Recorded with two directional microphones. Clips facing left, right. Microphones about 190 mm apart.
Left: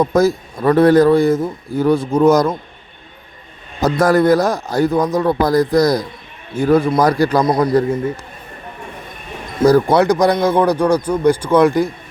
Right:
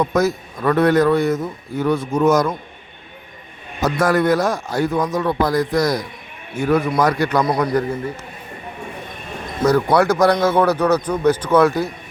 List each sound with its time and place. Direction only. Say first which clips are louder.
0.0 s a man's voice: left 4 dB; 30° left (ahead or behind)
3.8 s a man's voice: left 4 dB; 35° left (ahead or behind)
9.9 s a man's voice: left 2 dB; 20° left (ahead or behind)